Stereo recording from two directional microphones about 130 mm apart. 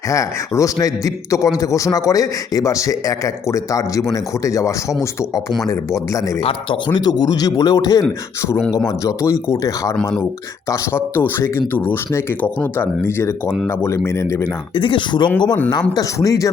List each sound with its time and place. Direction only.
0.1 s a man's voice: 25° left (ahead or behind)
6.4 s a man's voice: 40° left (ahead or behind)
9.0 s a man's voice: 25° left (ahead or behind)
14.8 s a man's voice: 40° left (ahead or behind)
16.0 s a man's voice: 25° left (ahead or behind)